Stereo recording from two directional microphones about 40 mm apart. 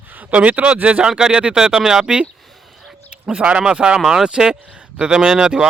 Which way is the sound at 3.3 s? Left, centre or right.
Right.